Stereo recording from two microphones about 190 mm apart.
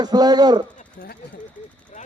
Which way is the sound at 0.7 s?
45° left (ahead or behind).